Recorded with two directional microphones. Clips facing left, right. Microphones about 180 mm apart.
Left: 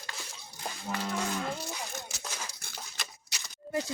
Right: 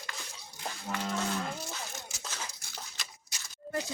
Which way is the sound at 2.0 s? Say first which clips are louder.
Left 4 dB; 70° left (ahead or behind).